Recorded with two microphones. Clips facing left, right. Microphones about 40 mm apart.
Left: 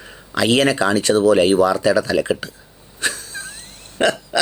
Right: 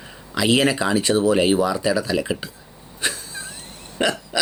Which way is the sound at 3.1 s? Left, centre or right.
Centre.